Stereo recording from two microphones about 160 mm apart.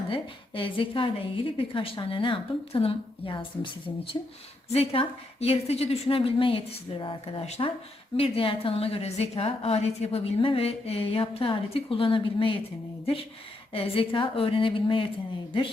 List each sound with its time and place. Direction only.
0.1 s a woman's voice: 35° left (ahead or behind)
13.7 s a woman's voice: 35° left (ahead or behind)